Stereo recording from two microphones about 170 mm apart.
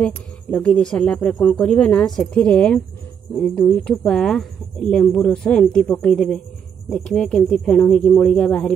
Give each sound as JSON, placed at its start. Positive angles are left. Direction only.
{"t": 0.0, "sound": "speech", "side_deg": 5}